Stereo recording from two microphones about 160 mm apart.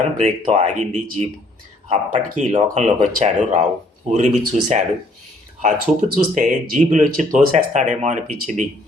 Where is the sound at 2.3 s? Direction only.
50° right (ahead or behind).